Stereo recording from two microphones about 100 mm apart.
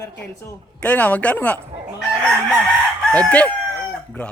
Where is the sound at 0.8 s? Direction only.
15° left (ahead or behind).